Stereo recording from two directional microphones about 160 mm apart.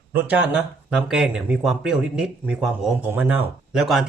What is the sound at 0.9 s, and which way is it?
Speech, 5° right (ahead or behind).